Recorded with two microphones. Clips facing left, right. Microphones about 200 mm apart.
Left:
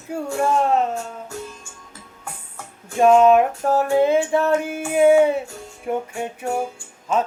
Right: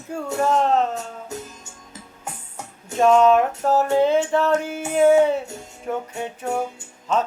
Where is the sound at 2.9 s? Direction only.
10° left (ahead or behind).